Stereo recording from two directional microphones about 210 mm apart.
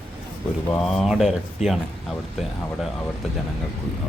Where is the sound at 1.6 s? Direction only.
35° left (ahead or behind).